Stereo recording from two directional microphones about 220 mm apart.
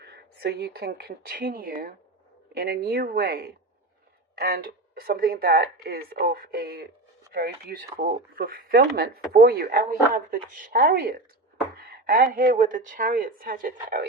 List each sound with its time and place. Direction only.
0.0 s a woman's voice: 45° right (ahead or behind)